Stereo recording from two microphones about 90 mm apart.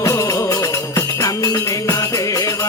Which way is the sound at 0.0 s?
35° left (ahead or behind).